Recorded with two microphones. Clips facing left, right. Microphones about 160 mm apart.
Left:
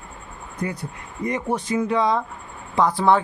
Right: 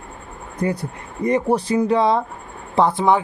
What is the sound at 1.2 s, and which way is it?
Speech, 35° right (ahead or behind).